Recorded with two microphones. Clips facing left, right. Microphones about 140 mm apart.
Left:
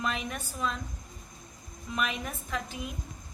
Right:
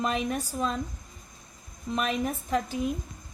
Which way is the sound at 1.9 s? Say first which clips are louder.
Right 5 dB; 40° right (ahead or behind).